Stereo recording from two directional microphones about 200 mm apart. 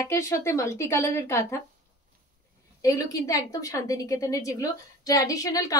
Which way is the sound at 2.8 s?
15° left (ahead or behind).